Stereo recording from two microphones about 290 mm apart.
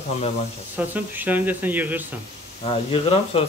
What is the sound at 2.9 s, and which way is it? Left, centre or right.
Speech, centre.